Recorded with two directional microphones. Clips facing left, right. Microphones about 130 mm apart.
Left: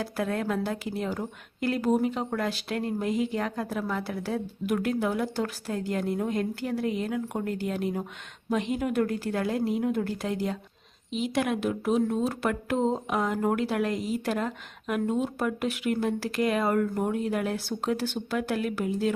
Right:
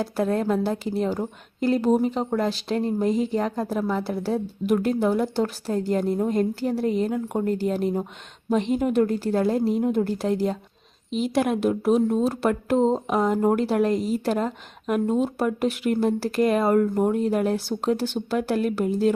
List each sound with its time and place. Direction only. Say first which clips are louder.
0.0 s a woman's voice: right 6 dB; 30° right (ahead or behind)